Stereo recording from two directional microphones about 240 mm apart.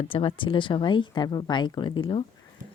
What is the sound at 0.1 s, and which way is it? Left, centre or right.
Speech, left.